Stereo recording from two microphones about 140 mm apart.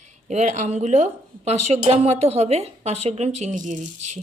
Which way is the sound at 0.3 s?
55° right (ahead or behind).